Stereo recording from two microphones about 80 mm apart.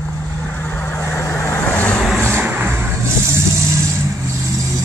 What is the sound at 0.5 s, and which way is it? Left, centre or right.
Vehicle, left.